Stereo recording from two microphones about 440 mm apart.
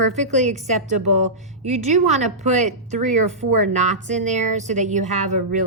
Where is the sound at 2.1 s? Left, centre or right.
Centre.